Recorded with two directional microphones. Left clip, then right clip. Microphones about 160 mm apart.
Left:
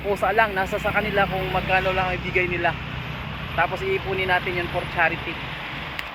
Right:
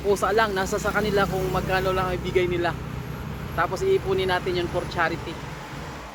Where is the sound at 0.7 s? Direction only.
5° right (ahead or behind).